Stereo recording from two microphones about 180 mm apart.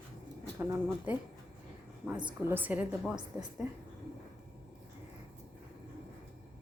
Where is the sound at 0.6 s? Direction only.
10° right (ahead or behind).